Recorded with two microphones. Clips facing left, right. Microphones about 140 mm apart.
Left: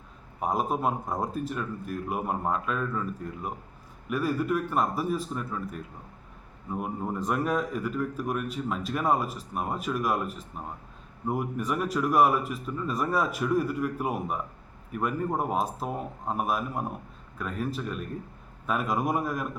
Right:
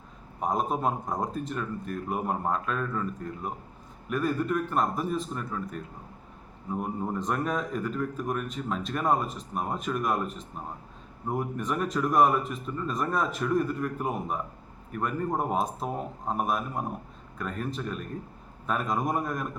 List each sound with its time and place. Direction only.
0.3 s a man's voice: 5° left (ahead or behind)
4.1 s a man's voice: 5° left (ahead or behind)